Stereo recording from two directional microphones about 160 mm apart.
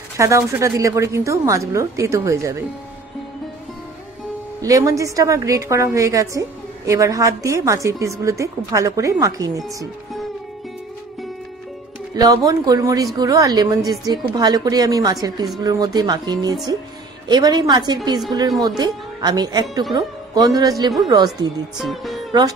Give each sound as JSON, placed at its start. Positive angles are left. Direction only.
{"t": 0.2, "sound": "a woman's voice", "side_deg": -20}
{"t": 4.6, "sound": "a woman's voice", "side_deg": -20}
{"t": 12.2, "sound": "a woman's voice", "side_deg": -25}
{"t": 21.7, "sound": "music", "side_deg": 0}